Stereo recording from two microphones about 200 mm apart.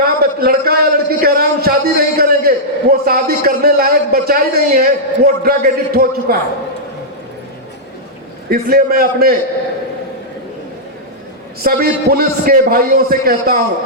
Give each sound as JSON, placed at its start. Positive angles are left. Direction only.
{"t": 0.0, "sound": "a man's voice", "side_deg": -50}
{"t": 8.4, "sound": "a man's voice", "side_deg": -50}
{"t": 11.6, "sound": "a man's voice", "side_deg": -50}